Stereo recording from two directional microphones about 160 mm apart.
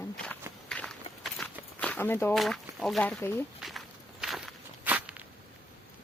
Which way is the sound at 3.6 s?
Centre (ahead or behind).